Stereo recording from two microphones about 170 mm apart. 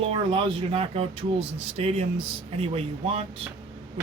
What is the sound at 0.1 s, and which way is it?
Speech, 30° right (ahead or behind).